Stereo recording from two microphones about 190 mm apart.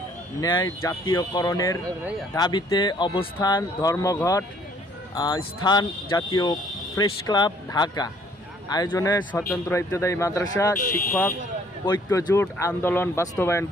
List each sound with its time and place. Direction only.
0.4 s speech: 20° left (ahead or behind)